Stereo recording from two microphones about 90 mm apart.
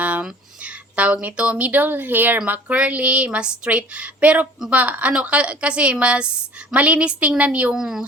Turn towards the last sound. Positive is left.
turn(degrees=-5)  # may be behind; listen again after turning